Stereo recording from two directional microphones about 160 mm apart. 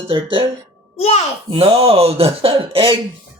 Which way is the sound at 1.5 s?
35° right (ahead or behind).